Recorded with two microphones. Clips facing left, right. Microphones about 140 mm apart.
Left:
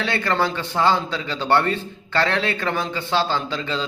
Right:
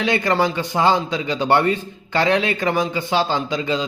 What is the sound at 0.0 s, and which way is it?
A man's voice, 15° right (ahead or behind).